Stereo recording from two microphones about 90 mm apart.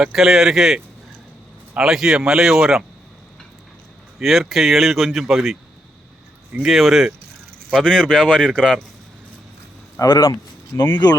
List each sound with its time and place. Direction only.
0.0 s speech: 5° right (ahead or behind)
4.2 s speech: centre (ahead or behind)
10.1 s speech: 65° left (ahead or behind)
10.8 s speech: 20° left (ahead or behind)